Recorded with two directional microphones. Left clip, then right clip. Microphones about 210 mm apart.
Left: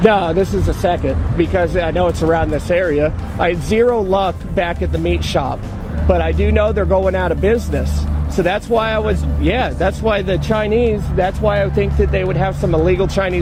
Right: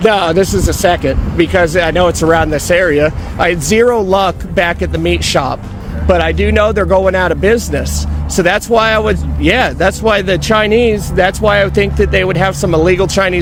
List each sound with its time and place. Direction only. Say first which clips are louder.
0.0 s speech: right 3 dB; 30° right (ahead or behind)